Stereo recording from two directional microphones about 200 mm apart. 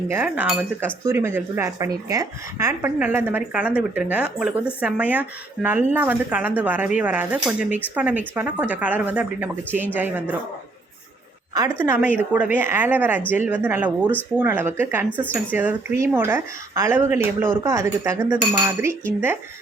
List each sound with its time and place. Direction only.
0.1 s a woman's voice: 10° right (ahead or behind)
11.5 s a woman's voice: 15° right (ahead or behind)